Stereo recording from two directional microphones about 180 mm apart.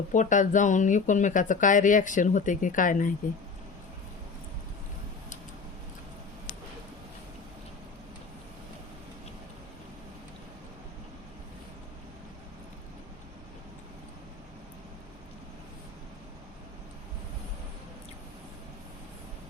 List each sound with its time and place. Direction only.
0.1 s speech: 45° left (ahead or behind)